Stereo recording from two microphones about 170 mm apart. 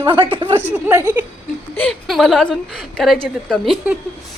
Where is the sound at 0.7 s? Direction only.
15° right (ahead or behind).